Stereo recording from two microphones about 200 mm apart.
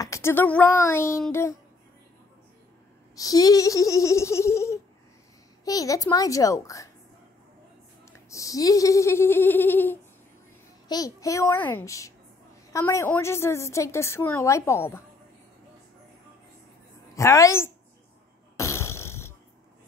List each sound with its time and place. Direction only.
0.0 s a woman's voice: 15° left (ahead or behind)
3.2 s a woman's voice: 20° left (ahead or behind)
8.3 s a woman's voice: 15° left (ahead or behind)
17.1 s a woman's voice: 15° left (ahead or behind)
18.6 s a sound: 15° left (ahead or behind)